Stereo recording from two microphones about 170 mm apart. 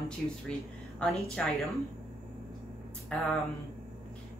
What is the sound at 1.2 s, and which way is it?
Speech, 5° left (ahead or behind).